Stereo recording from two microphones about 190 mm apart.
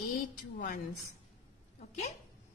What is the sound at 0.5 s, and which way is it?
Speech, 45° left (ahead or behind).